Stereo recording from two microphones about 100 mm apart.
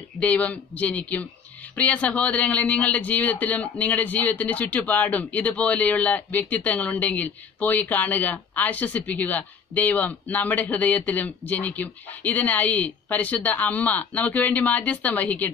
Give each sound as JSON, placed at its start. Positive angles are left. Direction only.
{"t": 0.2, "sound": "a man's voice", "side_deg": 15}